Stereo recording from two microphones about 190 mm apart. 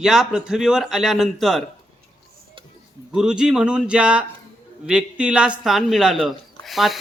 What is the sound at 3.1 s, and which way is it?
A man's voice, 5° right (ahead or behind).